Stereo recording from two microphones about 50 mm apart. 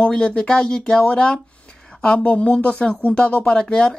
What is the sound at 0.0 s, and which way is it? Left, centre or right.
Speech, left.